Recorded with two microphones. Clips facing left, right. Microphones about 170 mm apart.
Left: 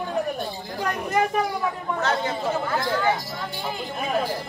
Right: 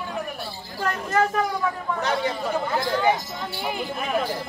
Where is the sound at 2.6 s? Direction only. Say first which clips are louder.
Right 3 dB; 15° right (ahead or behind).